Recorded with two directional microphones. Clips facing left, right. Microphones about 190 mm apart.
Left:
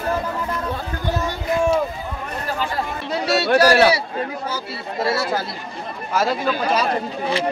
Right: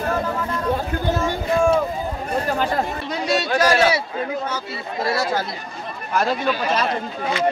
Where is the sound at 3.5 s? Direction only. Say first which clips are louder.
Left 4 dB; 35° left (ahead or behind).